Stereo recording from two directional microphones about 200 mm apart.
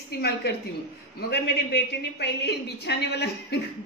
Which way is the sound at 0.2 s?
55° left (ahead or behind).